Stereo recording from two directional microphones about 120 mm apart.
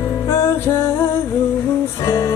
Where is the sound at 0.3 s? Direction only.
20° left (ahead or behind).